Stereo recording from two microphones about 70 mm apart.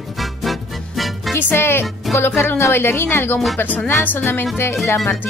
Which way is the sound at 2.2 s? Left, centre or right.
Left.